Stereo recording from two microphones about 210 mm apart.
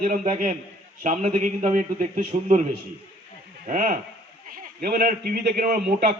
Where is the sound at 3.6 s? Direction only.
35° right (ahead or behind).